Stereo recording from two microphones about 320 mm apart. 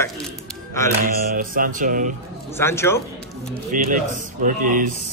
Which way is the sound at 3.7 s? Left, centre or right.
Right.